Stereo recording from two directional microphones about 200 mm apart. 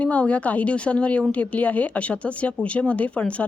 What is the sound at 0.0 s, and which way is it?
Speech, 5° left (ahead or behind).